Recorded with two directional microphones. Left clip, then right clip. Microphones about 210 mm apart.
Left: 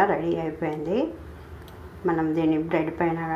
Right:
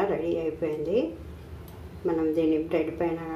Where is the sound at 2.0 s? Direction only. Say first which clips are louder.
Left 1 dB; 15° left (ahead or behind).